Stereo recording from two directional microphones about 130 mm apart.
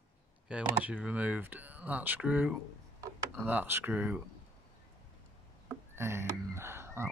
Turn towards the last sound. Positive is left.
turn(degrees=-20)  # may be behind; listen again after turning